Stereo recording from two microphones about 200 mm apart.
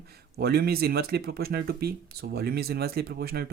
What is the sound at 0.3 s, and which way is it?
Speech, 50° right (ahead or behind).